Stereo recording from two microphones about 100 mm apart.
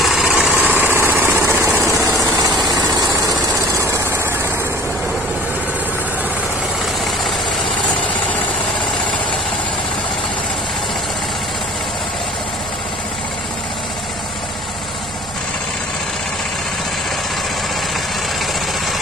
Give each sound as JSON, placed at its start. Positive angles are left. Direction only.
{"t": 0.0, "sound": "engine", "side_deg": 0}
{"t": 0.4, "sound": "engine", "side_deg": -15}
{"t": 1.8, "sound": "vehicle", "side_deg": -25}
{"t": 2.4, "sound": "vehicle", "side_deg": -40}